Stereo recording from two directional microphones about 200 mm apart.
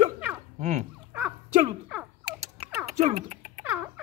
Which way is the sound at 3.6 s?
10° right (ahead or behind).